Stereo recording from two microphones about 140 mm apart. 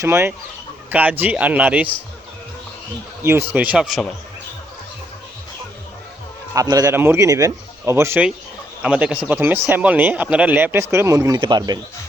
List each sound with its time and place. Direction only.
0.0 s speech: 15° right (ahead or behind)
3.5 s speech: 10° right (ahead or behind)
6.5 s a man's voice: 25° right (ahead or behind)
8.8 s a man's voice: 5° right (ahead or behind); by 11.8 s 30° right (ahead or behind)